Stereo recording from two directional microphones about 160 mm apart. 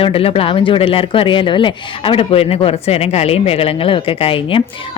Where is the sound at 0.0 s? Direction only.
35° left (ahead or behind).